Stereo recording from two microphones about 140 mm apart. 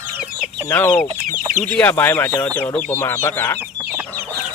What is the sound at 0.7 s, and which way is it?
Speech, 15° left (ahead or behind).